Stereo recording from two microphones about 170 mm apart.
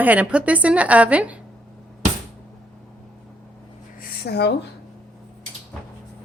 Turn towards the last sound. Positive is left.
turn(degrees=75)  # may be behind; listen again after turning